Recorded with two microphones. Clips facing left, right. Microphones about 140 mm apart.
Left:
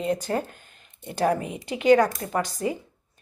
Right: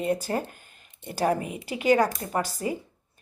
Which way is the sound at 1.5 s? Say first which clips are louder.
Left 4 dB; 5° right (ahead or behind).